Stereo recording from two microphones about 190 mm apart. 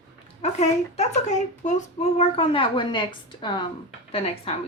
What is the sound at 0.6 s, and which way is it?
A woman's voice, 35° left (ahead or behind).